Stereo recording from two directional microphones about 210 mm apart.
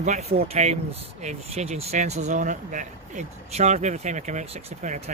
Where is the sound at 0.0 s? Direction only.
30° right (ahead or behind).